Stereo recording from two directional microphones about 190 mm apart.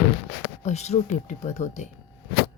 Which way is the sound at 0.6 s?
35° left (ahead or behind).